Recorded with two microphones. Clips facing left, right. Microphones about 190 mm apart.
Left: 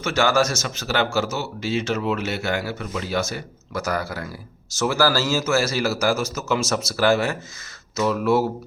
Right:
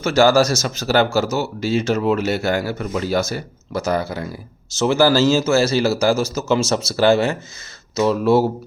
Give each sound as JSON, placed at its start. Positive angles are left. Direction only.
{"t": 0.0, "sound": "speech", "side_deg": -35}